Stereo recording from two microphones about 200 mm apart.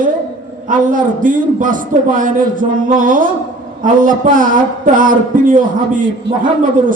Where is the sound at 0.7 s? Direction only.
40° right (ahead or behind).